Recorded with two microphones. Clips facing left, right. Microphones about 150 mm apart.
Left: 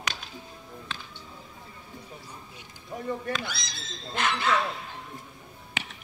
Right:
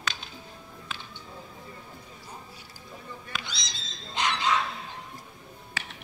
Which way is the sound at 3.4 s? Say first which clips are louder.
Left 3 dB; 20° right (ahead or behind).